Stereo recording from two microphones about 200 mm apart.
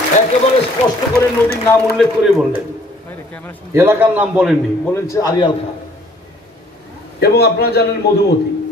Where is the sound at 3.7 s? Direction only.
10° right (ahead or behind).